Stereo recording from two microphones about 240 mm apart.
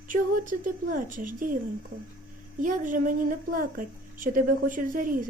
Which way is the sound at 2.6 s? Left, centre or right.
Right.